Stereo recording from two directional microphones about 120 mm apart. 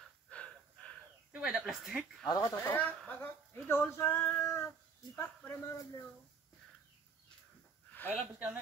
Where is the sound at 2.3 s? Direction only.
25° left (ahead or behind).